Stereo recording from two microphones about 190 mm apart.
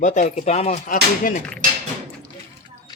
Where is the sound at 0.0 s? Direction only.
40° left (ahead or behind).